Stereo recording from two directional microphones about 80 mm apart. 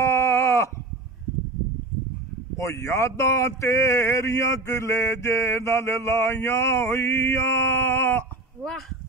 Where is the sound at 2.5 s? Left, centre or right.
Left.